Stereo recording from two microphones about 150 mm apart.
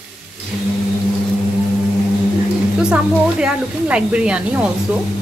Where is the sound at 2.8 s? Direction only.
5° right (ahead or behind).